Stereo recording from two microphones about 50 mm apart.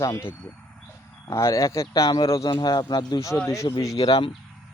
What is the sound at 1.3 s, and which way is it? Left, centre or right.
Speech, left.